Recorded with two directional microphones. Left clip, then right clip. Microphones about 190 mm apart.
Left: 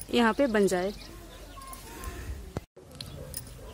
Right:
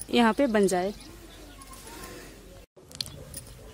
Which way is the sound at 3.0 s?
40° right (ahead or behind).